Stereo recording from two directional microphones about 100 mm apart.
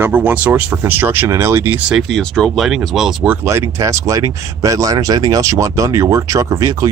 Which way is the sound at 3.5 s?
30° right (ahead or behind).